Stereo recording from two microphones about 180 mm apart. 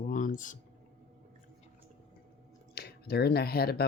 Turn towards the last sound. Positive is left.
turn(degrees=60)  # may be behind; listen again after turning